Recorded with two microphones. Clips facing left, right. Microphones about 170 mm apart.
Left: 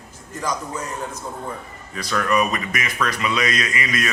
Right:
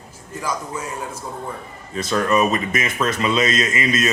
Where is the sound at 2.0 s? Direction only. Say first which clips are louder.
Right 3 dB; 25° right (ahead or behind).